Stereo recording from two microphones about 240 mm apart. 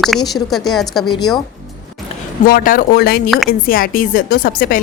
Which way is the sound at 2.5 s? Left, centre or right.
Left.